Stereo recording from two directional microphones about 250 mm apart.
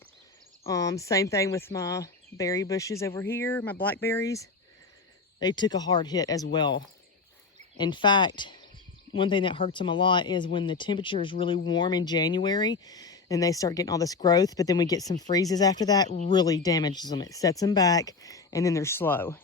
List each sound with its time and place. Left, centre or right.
0.7 s speech: centre
16.0 s speech: left
16.3 s speech: centre